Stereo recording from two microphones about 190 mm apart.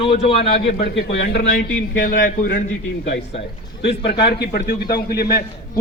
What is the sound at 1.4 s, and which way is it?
Speech, 40° left (ahead or behind).